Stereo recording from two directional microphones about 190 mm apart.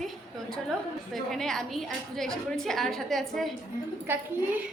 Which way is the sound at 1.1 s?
Centre (ahead or behind).